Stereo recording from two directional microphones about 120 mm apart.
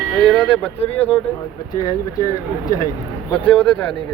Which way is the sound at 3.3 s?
10° left (ahead or behind).